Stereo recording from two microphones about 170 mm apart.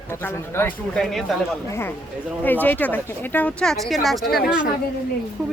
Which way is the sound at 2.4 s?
10° left (ahead or behind).